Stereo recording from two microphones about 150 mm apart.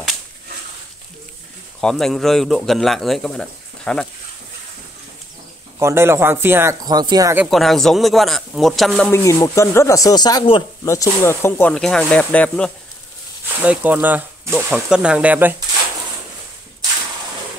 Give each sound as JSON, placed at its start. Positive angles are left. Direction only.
{"t": 1.8, "sound": "speech", "side_deg": 5}
{"t": 5.8, "sound": "speech", "side_deg": -15}
{"t": 7.4, "sound": "speech", "side_deg": 0}
{"t": 9.1, "sound": "speech", "side_deg": 20}
{"t": 10.9, "sound": "speech", "side_deg": 20}
{"t": 13.7, "sound": "speech", "side_deg": -10}